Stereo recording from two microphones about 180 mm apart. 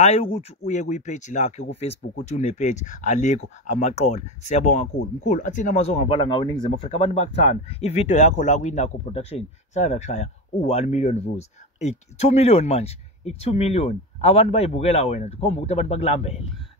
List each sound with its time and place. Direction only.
0.0 s speech: 35° left (ahead or behind)